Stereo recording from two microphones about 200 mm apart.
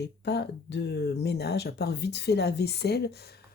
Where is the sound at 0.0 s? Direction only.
60° left (ahead or behind).